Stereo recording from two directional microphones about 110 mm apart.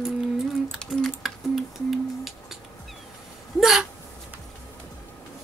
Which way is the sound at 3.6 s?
5° right (ahead or behind).